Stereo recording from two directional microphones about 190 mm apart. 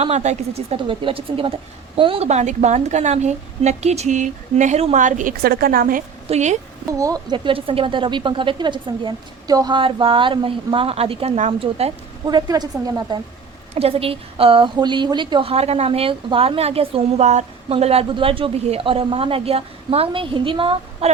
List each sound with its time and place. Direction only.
0.0 s a woman's voice: 35° right (ahead or behind)
6.2 s a woman's voice: 35° right (ahead or behind)
6.9 s a woman's voice: 20° right (ahead or behind)
13.7 s a woman's voice: 30° right (ahead or behind)